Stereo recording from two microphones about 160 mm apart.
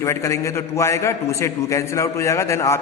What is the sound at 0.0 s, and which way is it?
A man's voice, 20° left (ahead or behind).